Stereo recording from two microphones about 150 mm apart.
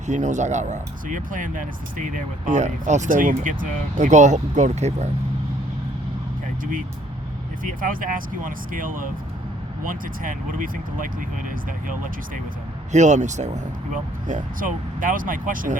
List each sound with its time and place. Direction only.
0.1 s speech: 55° right (ahead or behind)
7.6 s speech: 65° right (ahead or behind)
12.9 s speech: 50° right (ahead or behind)